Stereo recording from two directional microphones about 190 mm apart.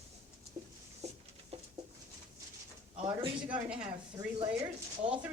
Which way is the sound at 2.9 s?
30° right (ahead or behind).